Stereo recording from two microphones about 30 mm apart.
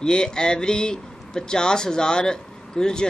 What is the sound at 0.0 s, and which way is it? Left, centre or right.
Speech, left.